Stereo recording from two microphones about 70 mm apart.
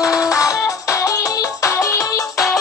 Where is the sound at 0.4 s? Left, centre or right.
Left.